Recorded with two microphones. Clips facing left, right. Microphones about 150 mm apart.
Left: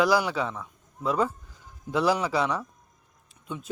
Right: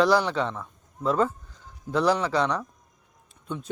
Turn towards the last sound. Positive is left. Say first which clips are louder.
# right 3 dB
turn(degrees=5)  # may be behind; listen again after turning